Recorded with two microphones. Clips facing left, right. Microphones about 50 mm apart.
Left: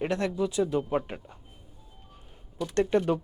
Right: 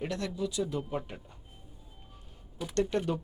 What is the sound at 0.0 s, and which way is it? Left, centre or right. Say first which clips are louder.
Speech: left 6 dB; left.